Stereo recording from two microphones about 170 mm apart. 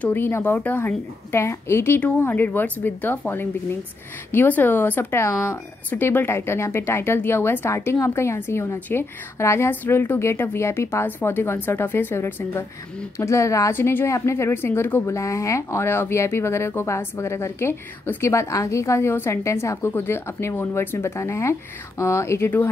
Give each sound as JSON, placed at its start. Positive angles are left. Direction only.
{"t": 0.0, "sound": "a woman's voice", "side_deg": 10}